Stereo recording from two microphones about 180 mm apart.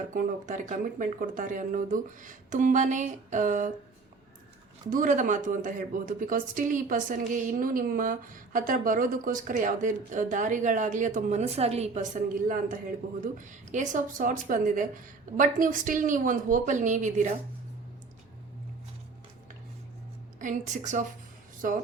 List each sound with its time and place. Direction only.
0.1 s speech: 45° right (ahead or behind)
4.9 s speech: 45° right (ahead or behind)
20.4 s speech: 45° right (ahead or behind)